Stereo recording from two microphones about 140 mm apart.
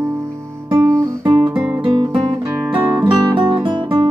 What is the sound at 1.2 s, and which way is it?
Guitar, 35° right (ahead or behind).